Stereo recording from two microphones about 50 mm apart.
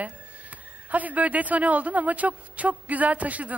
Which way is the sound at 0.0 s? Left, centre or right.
Right.